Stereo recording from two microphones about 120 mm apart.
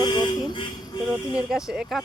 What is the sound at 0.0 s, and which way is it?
Vehicle, 35° left (ahead or behind).